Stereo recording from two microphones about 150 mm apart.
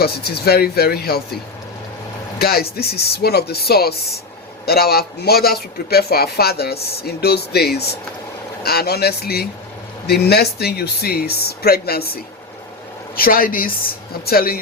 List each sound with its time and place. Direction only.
0.0 s speech: 90° left
2.4 s speech: 90° left
13.1 s speech: 75° left (ahead or behind)
14.1 s speech: 85° left